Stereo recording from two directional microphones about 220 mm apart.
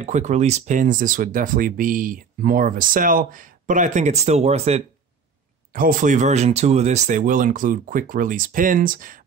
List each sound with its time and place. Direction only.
0.0 s speech: 30° right (ahead or behind)
5.7 s speech: 40° right (ahead or behind)